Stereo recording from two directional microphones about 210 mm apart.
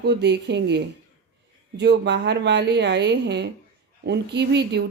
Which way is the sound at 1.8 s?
55° right (ahead or behind).